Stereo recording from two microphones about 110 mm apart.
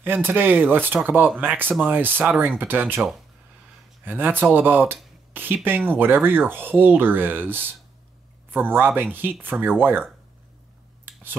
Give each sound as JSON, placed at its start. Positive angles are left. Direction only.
{"t": 0.0, "sound": "speech", "side_deg": -20}
{"t": 4.0, "sound": "speech", "side_deg": -15}